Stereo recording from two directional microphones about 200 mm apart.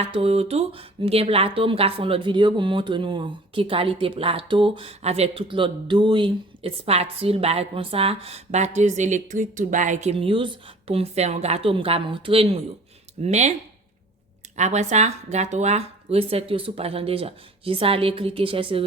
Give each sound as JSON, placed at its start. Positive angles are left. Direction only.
{"t": 0.0, "sound": "speech", "side_deg": -30}
{"t": 14.5, "sound": "speech", "side_deg": -35}